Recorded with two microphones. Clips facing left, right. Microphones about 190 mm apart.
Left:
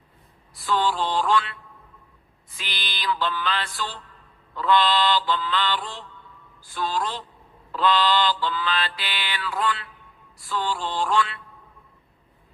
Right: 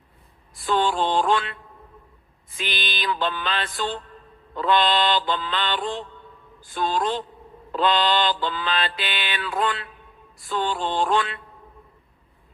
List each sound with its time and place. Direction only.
0.5 s mantra: 20° right (ahead or behind)
2.6 s mantra: 20° right (ahead or behind)